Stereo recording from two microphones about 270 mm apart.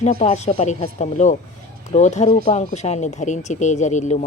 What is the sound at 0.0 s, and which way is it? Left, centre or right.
Speech, left.